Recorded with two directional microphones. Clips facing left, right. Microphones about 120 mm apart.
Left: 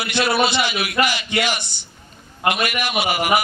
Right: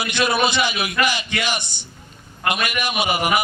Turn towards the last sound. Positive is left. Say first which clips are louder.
# even
turn(degrees=-20)  # may be behind; listen again after turning